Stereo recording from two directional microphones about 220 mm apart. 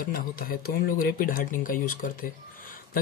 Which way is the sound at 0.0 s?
40° left (ahead or behind).